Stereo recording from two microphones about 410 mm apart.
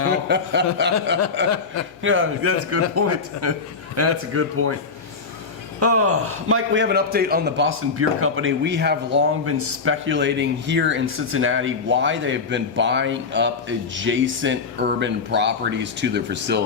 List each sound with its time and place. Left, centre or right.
0.1 s a man's voice: right
2.0 s a man's voice: right
5.8 s a man's voice: right